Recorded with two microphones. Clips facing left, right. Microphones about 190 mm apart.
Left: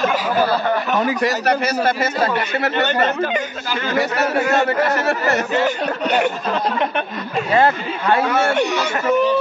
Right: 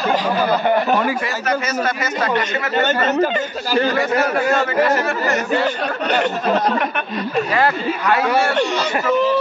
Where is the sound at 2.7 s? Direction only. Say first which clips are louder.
Right 4 dB; 40° right (ahead or behind).